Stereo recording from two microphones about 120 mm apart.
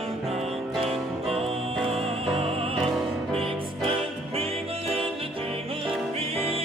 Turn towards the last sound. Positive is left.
turn(degrees=-55)  # may be behind; listen again after turning